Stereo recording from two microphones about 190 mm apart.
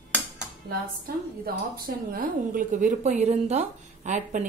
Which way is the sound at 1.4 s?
50° right (ahead or behind).